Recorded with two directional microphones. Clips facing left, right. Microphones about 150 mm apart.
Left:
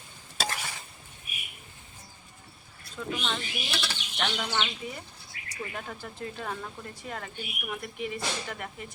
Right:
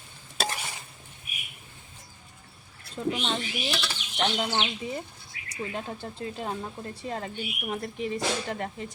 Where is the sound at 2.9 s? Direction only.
35° right (ahead or behind).